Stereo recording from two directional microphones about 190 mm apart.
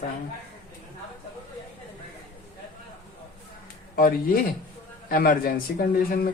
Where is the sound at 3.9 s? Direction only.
50° left (ahead or behind).